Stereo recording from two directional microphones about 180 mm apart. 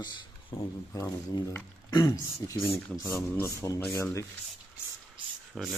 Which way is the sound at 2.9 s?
Centre (ahead or behind).